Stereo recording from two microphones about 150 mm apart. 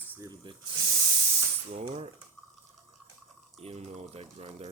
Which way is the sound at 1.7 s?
45° right (ahead or behind).